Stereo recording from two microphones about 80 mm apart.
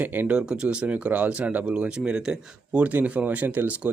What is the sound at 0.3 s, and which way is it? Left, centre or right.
Speech, centre.